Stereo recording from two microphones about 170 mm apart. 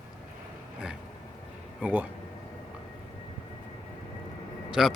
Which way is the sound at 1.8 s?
10° right (ahead or behind).